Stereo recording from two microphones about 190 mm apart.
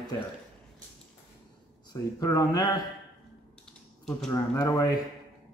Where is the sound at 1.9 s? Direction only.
20° left (ahead or behind).